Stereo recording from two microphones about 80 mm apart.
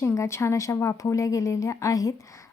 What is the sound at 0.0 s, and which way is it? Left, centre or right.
Speech, left.